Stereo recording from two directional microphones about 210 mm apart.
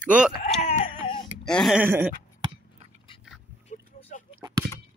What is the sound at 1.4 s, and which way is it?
Speech, centre (ahead or behind).